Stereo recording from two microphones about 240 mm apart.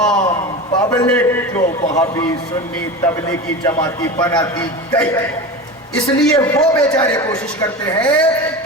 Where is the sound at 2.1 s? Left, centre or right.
Centre.